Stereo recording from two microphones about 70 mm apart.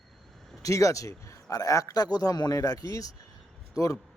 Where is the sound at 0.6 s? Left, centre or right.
Left.